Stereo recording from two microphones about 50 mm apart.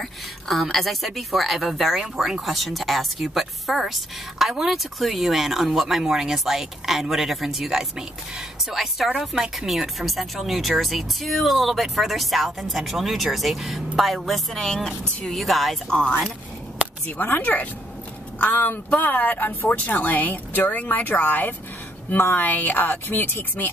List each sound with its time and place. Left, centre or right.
0.0 s speech: centre
17.4 s speech: left
18.4 s speech: left